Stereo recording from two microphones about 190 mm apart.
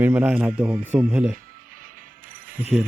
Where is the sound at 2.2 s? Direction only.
45° right (ahead or behind).